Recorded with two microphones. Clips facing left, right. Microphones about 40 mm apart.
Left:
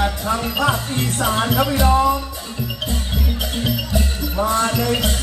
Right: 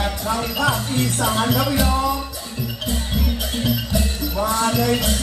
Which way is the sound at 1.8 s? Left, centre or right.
Left.